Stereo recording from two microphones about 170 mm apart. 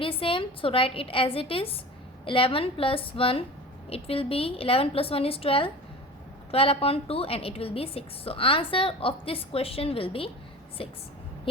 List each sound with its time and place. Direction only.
0.0 s a woman's voice: 30° left (ahead or behind)